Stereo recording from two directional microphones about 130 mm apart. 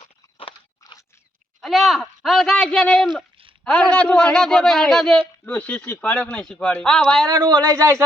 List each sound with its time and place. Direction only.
0.0 s a sound: 45° left (ahead or behind)
1.6 s a man's voice: centre (ahead or behind)
5.5 s speech: 10° left (ahead or behind)
7.3 s speech: 30° right (ahead or behind)